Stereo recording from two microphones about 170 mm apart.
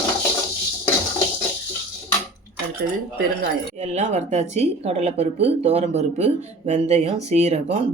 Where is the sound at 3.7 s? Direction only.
40° right (ahead or behind).